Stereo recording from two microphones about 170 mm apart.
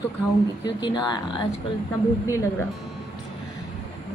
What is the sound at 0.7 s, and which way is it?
Speech, 25° left (ahead or behind).